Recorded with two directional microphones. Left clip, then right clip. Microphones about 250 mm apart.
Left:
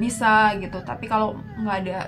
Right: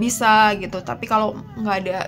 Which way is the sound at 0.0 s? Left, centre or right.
Right.